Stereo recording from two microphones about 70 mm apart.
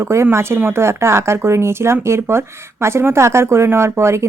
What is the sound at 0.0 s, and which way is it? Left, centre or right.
Speech, right.